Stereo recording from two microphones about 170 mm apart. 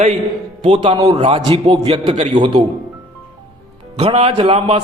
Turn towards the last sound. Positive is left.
turn(degrees=-35)  # may be behind; listen again after turning